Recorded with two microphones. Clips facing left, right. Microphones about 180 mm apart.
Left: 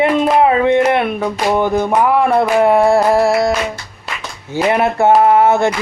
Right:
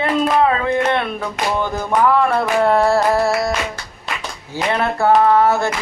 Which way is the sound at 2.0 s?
15° left (ahead or behind).